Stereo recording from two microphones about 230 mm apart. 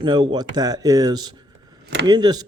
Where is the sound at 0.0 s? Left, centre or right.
Right.